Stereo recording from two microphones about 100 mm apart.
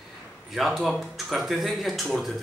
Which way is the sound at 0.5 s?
Centre (ahead or behind).